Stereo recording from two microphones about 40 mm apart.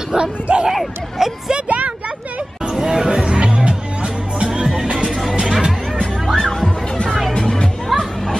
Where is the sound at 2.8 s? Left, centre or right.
Centre.